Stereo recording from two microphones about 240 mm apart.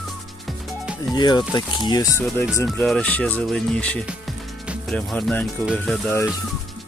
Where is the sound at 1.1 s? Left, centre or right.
Centre.